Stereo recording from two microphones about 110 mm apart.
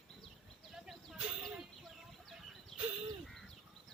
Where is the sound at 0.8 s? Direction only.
Centre (ahead or behind).